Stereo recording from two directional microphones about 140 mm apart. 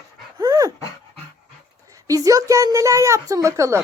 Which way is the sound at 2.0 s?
25° right (ahead or behind).